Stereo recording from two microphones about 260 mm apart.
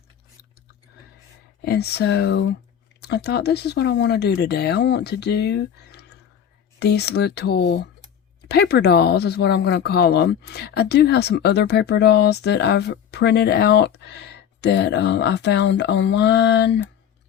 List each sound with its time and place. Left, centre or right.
1.6 s speech: left